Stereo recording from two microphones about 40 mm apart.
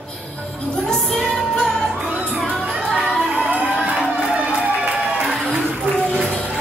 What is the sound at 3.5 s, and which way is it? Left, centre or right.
Run, right.